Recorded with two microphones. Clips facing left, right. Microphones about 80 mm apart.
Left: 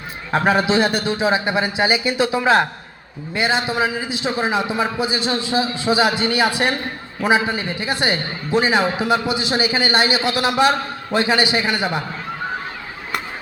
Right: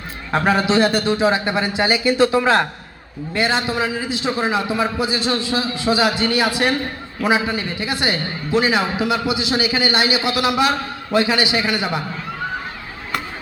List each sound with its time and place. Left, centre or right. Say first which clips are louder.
0.3 s a man's voice: even; centre